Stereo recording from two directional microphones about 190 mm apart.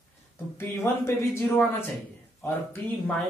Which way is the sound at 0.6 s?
15° left (ahead or behind).